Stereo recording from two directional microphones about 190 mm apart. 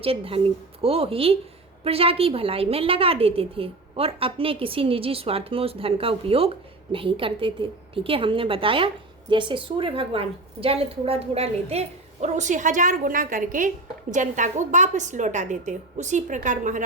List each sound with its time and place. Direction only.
0.0 s a woman's voice: 30° right (ahead or behind)